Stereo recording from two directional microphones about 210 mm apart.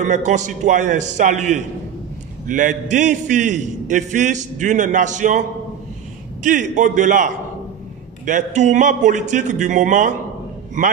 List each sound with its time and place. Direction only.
0.0 s a man's voice: 35° right (ahead or behind)
6.4 s a man's voice: 35° right (ahead or behind)